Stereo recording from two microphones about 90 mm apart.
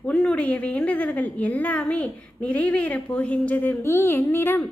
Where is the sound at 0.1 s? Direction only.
10° left (ahead or behind).